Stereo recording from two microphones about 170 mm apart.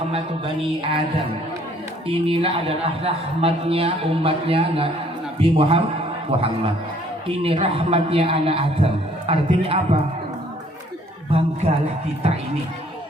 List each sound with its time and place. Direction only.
0.8 s a woman's voice: 35° right (ahead or behind)
2.0 s a woman's voice: 35° right (ahead or behind)
7.3 s a woman's voice: 35° right (ahead or behind)
11.3 s music: 35° right (ahead or behind)